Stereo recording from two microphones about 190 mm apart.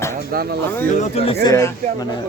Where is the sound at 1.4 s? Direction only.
15° left (ahead or behind).